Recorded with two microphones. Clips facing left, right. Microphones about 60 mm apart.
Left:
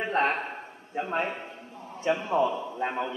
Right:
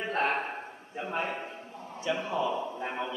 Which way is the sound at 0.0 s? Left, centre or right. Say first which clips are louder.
Left 4 dB; left.